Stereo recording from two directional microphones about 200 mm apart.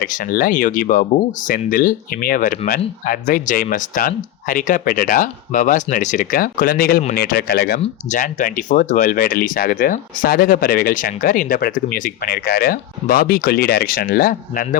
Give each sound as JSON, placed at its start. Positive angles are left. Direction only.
{"t": 0.0, "sound": "speech", "side_deg": 45}
{"t": 7.8, "sound": "speech", "side_deg": 40}